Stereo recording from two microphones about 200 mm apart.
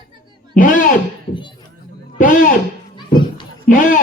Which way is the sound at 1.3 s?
25° left (ahead or behind).